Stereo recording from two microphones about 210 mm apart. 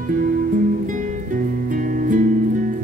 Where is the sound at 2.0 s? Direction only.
40° right (ahead or behind).